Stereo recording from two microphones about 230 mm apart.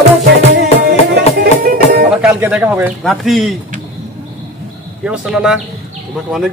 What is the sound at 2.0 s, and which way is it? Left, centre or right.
Speech, centre.